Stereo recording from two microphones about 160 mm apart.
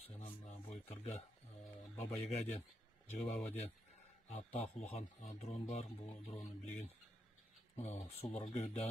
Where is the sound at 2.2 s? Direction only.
40° left (ahead or behind).